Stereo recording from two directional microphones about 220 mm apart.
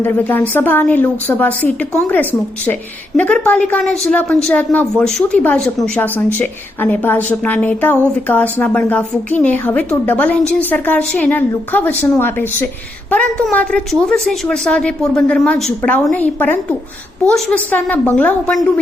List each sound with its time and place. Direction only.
0.0 s a woman's voice: 10° left (ahead or behind)